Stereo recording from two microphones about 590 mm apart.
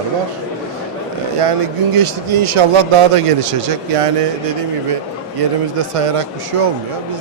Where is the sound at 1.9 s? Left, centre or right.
Right.